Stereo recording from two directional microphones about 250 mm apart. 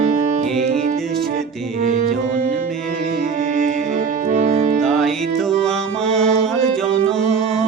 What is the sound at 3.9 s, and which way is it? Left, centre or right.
Music, right.